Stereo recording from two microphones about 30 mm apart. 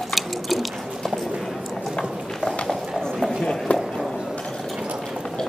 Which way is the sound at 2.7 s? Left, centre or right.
Centre.